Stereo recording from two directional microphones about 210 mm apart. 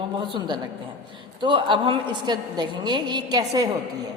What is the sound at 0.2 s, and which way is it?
A woman's voice, 20° right (ahead or behind).